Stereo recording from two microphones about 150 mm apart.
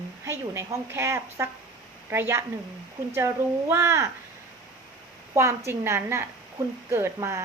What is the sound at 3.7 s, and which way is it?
Speech, 20° right (ahead or behind).